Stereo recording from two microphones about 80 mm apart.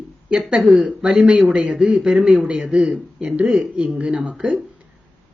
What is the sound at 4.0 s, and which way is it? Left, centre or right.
Speech, centre.